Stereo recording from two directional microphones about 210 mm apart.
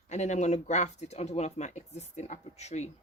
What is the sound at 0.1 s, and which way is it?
Speech, 35° left (ahead or behind).